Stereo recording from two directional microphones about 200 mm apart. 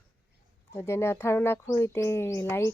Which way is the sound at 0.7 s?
15° left (ahead or behind).